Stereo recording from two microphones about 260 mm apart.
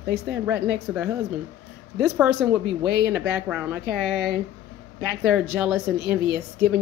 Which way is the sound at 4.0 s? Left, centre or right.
Left.